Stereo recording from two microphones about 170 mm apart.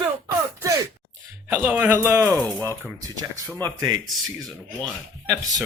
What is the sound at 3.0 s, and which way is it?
Speech, 20° right (ahead or behind).